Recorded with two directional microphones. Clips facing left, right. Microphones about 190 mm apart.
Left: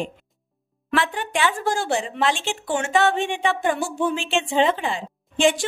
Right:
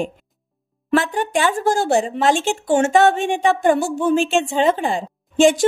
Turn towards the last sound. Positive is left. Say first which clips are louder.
# right 5 dB
turn(degrees=-45)  # may be behind; listen again after turning